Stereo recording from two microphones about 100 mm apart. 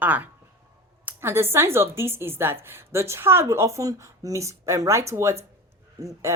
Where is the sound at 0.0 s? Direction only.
15° right (ahead or behind).